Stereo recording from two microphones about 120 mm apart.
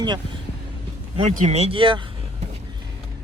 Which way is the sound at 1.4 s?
60° right (ahead or behind).